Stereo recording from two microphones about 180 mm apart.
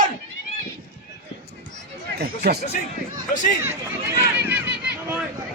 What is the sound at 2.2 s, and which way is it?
Speech, 60° right (ahead or behind).